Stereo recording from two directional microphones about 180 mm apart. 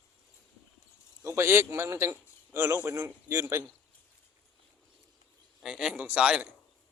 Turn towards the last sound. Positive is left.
turn(degrees=-5)  # may be behind; listen again after turning